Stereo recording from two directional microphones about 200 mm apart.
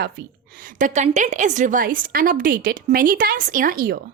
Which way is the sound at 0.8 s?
35° right (ahead or behind).